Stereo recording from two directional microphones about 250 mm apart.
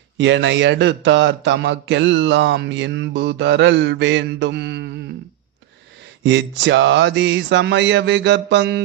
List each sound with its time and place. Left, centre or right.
0.2 s a man's voice: right
6.2 s a man's voice: right